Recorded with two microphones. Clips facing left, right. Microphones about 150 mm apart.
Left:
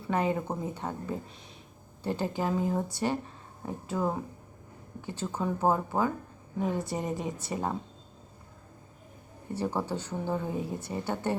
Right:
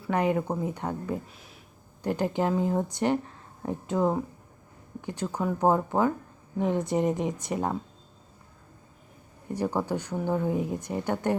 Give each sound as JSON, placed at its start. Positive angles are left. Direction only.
{"t": 0.1, "sound": "speech", "side_deg": -15}
{"t": 2.0, "sound": "speech", "side_deg": -15}
{"t": 9.5, "sound": "speech", "side_deg": -15}